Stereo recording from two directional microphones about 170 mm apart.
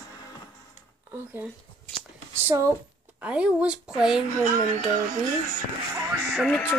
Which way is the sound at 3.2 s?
5° right (ahead or behind).